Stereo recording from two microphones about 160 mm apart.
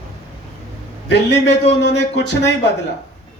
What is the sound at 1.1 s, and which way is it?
A man's voice, 90° left.